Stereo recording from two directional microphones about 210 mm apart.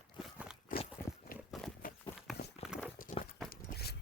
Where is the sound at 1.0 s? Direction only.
45° left (ahead or behind).